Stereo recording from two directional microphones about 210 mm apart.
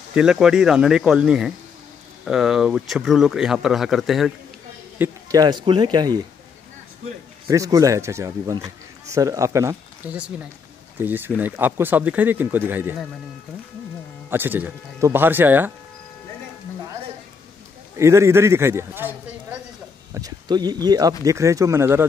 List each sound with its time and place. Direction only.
0.1 s speech: 5° right (ahead or behind)
4.9 s speech: 15° right (ahead or behind)
7.4 s speech: 15° right (ahead or behind)
14.3 s speech: 10° right (ahead or behind)
17.9 s speech: 15° right (ahead or behind)
20.2 s speech: 20° right (ahead or behind)